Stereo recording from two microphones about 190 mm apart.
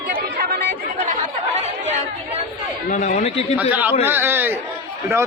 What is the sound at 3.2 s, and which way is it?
Speech, 30° left (ahead or behind).